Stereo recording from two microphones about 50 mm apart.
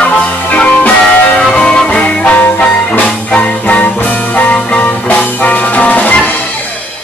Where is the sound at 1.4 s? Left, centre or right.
Centre.